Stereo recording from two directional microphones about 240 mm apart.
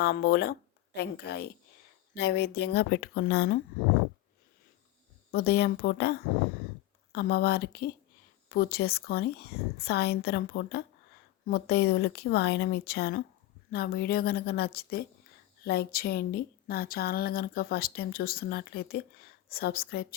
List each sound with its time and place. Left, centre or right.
0.0 s speech: left
5.3 s speech: left